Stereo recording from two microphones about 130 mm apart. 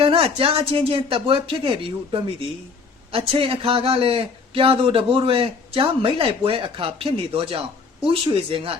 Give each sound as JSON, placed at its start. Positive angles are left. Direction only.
{"t": 0.0, "sound": "a man's voice", "side_deg": -45}